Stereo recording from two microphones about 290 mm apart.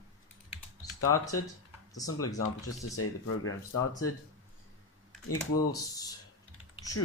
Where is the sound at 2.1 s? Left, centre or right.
Left.